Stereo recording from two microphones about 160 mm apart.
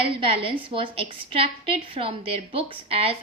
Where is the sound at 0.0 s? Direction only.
35° right (ahead or behind).